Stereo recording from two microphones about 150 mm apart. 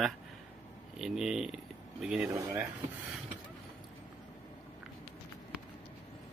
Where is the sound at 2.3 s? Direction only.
20° right (ahead or behind).